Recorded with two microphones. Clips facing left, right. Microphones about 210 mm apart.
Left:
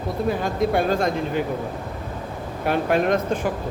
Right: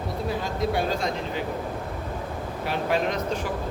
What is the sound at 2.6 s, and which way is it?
Speech, 55° left (ahead or behind).